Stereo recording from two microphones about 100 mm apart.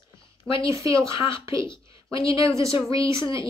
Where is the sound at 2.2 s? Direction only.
30° right (ahead or behind).